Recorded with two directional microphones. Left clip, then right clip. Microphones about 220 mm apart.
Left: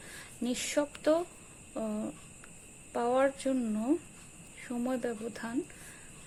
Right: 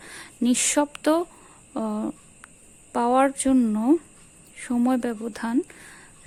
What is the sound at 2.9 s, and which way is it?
A woman's voice, 30° right (ahead or behind).